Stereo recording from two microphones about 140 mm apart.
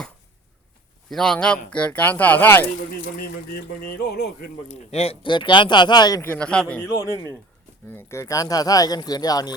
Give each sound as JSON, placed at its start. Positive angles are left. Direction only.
{"t": 1.1, "sound": "speech", "side_deg": 5}
{"t": 4.9, "sound": "speech", "side_deg": 45}
{"t": 6.2, "sound": "speech", "side_deg": 10}
{"t": 7.9, "sound": "speech", "side_deg": 15}